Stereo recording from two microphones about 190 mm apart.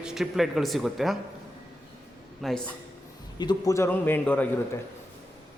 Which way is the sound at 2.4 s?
Centre (ahead or behind).